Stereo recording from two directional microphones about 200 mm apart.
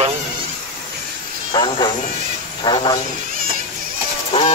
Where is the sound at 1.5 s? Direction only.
20° left (ahead or behind).